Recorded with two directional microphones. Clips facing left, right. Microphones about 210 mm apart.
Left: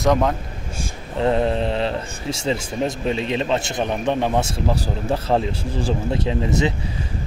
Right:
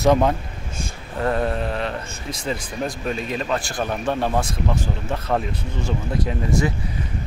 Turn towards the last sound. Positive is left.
turn(degrees=25)  # may be behind; listen again after turning